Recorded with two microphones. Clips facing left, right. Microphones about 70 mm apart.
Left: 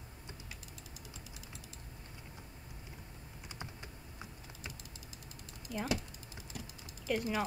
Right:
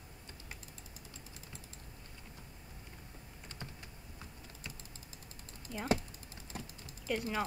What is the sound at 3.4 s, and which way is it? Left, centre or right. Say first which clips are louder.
Typing: left 2 dB; centre.